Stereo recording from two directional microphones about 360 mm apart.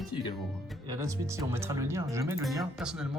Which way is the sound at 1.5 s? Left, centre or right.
Centre.